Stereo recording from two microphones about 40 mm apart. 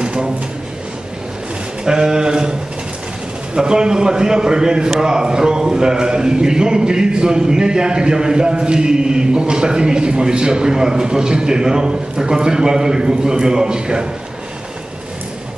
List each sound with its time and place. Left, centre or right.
0.0 s drawer open or close: right
1.9 s a man's voice: centre
3.5 s a man's voice: centre